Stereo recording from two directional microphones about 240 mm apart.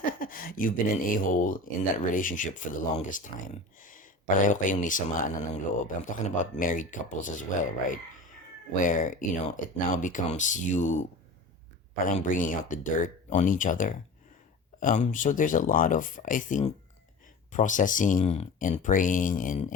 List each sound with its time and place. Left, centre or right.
0.0 s speech: left
12.0 s speech: left